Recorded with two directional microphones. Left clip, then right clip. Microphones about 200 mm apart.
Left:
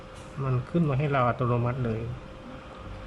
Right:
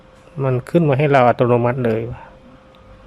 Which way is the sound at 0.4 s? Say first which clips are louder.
Right 13 dB; 35° right (ahead or behind).